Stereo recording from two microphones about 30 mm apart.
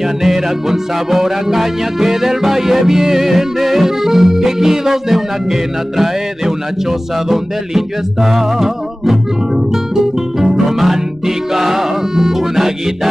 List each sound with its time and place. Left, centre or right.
0.0 s music: centre